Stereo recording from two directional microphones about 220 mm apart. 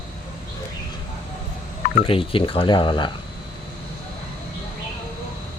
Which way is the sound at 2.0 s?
25° left (ahead or behind).